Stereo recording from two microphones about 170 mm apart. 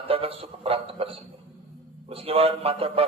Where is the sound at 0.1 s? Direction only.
35° right (ahead or behind).